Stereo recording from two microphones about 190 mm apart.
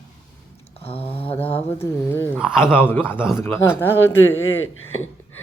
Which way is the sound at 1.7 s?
10° left (ahead or behind).